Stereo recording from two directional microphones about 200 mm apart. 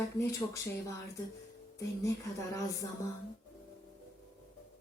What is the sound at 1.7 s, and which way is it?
Speech, 15° left (ahead or behind).